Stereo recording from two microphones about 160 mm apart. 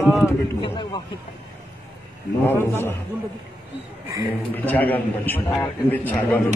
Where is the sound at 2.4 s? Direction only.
15° left (ahead or behind).